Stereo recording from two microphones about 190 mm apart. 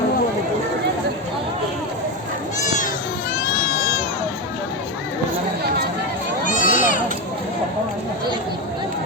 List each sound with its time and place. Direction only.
6.4 s crowd: 45° left (ahead or behind)